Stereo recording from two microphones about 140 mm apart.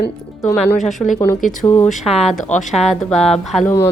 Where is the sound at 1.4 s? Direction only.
70° left (ahead or behind).